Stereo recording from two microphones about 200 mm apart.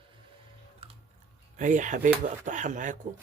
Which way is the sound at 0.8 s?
25° right (ahead or behind).